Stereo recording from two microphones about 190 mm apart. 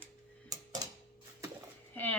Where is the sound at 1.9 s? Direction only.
10° left (ahead or behind).